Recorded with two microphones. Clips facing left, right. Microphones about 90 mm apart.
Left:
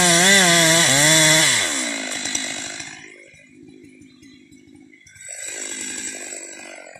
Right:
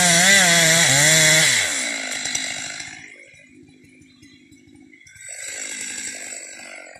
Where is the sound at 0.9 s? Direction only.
25° right (ahead or behind).